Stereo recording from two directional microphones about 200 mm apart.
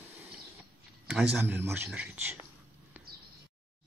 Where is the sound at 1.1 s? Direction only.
5° right (ahead or behind).